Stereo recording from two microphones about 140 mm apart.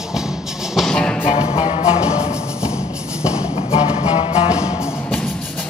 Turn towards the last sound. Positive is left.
turn(degrees=45)  # may be behind; listen again after turning